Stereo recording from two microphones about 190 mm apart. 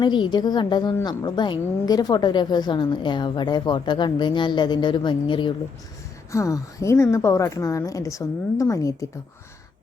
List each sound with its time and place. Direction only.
0.0 s a woman's voice: 25° left (ahead or behind)